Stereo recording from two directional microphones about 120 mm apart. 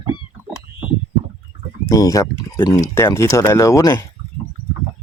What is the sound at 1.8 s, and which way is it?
Speech, 30° left (ahead or behind).